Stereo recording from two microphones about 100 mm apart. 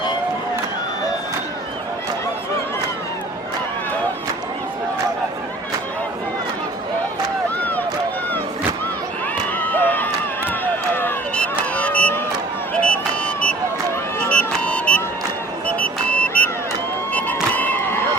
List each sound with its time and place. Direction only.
7.6 s run: 15° left (ahead or behind)
9.6 s a sound: 15° left (ahead or behind)
12.7 s vehicle: 10° left (ahead or behind)
14.3 s music: 15° left (ahead or behind)
15.6 s vehicle: 15° left (ahead or behind)
17.1 s crowd: 15° left (ahead or behind)